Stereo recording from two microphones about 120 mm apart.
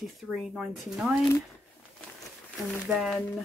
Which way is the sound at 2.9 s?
5° right (ahead or behind).